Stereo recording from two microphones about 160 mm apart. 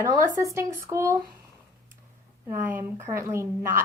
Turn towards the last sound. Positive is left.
turn(degrees=-15)  # may be behind; listen again after turning